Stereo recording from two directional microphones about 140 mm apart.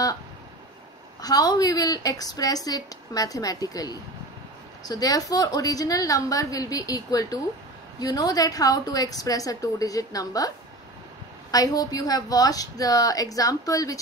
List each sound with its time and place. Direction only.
1.2 s a woman's voice: 30° left (ahead or behind)
11.5 s a woman's voice: 25° left (ahead or behind)